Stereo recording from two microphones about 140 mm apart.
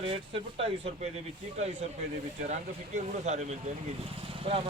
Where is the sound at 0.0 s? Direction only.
45° right (ahead or behind).